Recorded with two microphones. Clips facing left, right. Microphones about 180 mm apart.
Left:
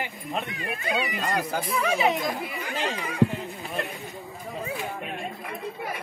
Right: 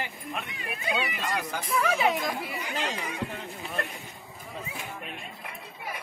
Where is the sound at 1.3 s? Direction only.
30° left (ahead or behind).